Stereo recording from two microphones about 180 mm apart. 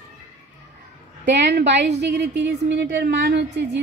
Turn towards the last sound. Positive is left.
turn(degrees=-75)  # may be behind; listen again after turning